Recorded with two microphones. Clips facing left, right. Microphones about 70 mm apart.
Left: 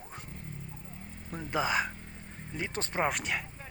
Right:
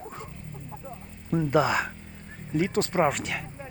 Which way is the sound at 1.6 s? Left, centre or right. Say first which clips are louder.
Right 4 dB; centre.